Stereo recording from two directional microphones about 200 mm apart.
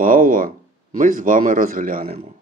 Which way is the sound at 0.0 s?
45° right (ahead or behind).